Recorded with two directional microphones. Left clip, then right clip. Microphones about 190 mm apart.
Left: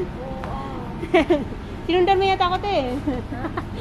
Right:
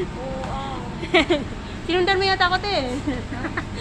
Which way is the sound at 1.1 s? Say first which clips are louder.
Even; 15° left (ahead or behind).